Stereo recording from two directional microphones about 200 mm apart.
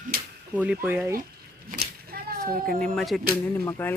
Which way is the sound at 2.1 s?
50° right (ahead or behind).